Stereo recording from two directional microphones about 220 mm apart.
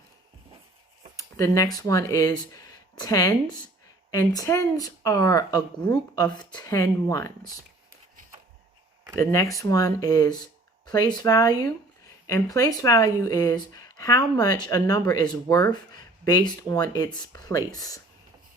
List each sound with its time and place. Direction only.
1.1 s speech: 15° left (ahead or behind)
9.1 s speech: 15° left (ahead or behind)